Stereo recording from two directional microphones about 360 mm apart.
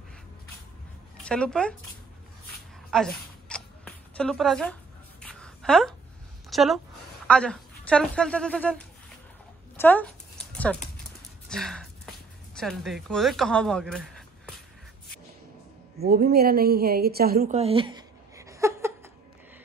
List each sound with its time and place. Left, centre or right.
1.1 s speech: centre
2.9 s zipper: centre
5.2 s a sound: centre
6.5 s speech: centre
9.8 s a sound: centre
11.4 s speech: centre
16.0 s a woman's voice: right; by 18.9 s centre